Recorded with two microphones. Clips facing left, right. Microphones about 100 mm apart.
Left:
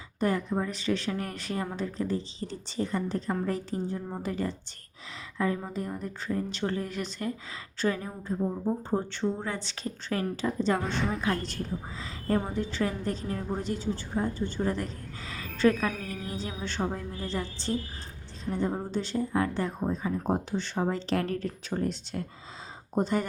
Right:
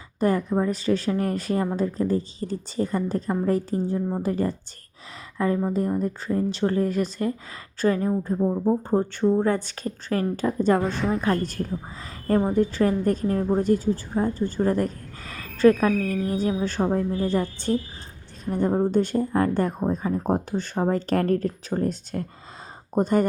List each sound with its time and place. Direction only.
0.2 s a woman's voice: 40° right (ahead or behind)
6.0 s a woman's voice: 35° right (ahead or behind)
10.8 s a woman's voice: centre (ahead or behind)
11.2 s a woman's voice: 45° right (ahead or behind)